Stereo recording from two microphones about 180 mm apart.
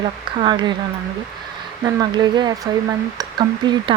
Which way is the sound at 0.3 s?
25° right (ahead or behind).